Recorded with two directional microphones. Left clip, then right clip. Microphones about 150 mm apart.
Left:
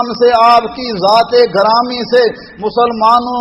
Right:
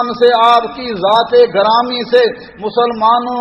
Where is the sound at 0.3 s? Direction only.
35° left (ahead or behind).